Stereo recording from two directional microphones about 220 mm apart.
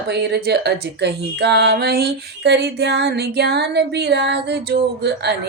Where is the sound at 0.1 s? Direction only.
50° right (ahead or behind).